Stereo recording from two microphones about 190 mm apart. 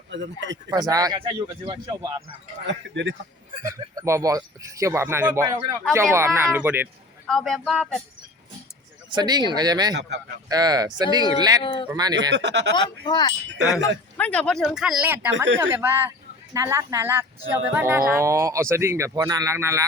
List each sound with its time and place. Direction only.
0.1 s speech: 70° right (ahead or behind)
0.7 s speech: 20° right (ahead or behind)
2.6 s speech: 75° right (ahead or behind)
3.6 s speech: 15° right (ahead or behind)
7.3 s speech: centre (ahead or behind)
9.0 s speech: 20° right (ahead or behind)
9.9 s speech: 65° right (ahead or behind)
10.5 s speech: 20° right (ahead or behind)
12.3 s speech: 65° right (ahead or behind)
13.1 s speech: 25° left (ahead or behind)
14.2 s speech: 5° left (ahead or behind); by 19.8 s 15° right (ahead or behind)